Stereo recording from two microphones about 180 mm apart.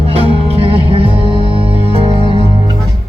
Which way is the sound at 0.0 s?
35° right (ahead or behind).